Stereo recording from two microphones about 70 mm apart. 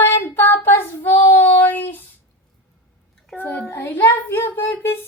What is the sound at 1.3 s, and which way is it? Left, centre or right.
Child singing, left.